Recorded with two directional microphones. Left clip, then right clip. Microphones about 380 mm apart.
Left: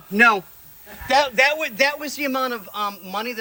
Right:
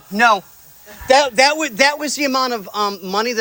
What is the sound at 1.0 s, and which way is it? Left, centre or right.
A man's voice, right.